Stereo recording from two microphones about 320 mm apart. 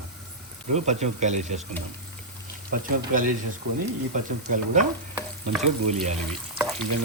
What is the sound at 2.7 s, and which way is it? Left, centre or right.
Speech, right.